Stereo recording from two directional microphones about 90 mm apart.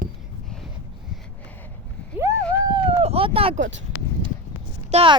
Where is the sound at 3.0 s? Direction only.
90° right.